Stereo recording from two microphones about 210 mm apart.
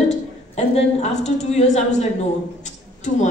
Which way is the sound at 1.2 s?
35° left (ahead or behind).